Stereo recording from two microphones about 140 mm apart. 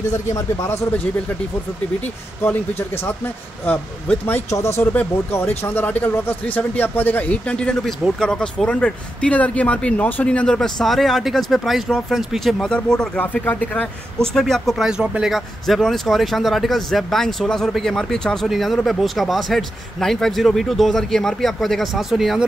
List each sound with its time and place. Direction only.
0.3 s speech: 20° left (ahead or behind)
3.6 s a man's voice: 15° left (ahead or behind)